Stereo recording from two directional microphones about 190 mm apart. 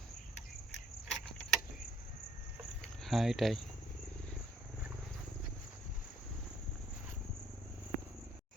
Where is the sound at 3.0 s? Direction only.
Centre (ahead or behind).